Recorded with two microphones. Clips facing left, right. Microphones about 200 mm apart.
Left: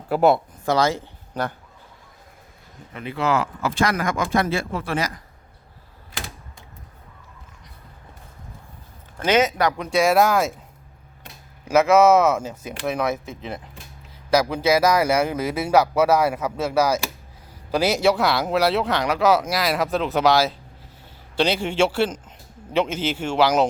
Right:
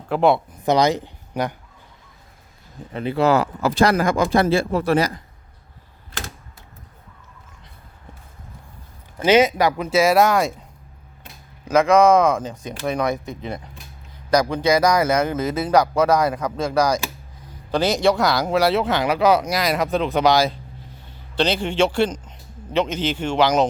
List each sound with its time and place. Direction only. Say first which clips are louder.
0.1 s speech: even; 5° left (ahead or behind)
0.6 s speech: right 3 dB; 20° right (ahead or behind)
2.9 s speech: right 5 dB; 30° right (ahead or behind)
9.1 s speech: right 4 dB; 10° right (ahead or behind)
11.7 s speech: even; 5° left (ahead or behind)